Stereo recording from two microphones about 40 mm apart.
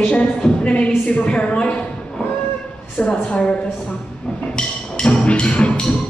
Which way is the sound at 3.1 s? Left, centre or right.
Left.